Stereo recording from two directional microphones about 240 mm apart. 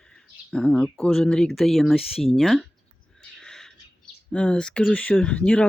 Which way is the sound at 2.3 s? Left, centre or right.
Centre.